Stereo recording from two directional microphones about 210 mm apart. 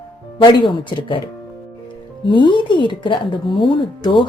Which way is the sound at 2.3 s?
20° left (ahead or behind).